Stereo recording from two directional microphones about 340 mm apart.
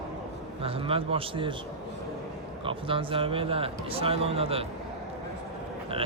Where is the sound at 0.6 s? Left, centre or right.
Centre.